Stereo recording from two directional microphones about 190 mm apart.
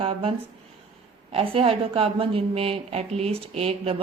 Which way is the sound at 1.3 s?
30° right (ahead or behind).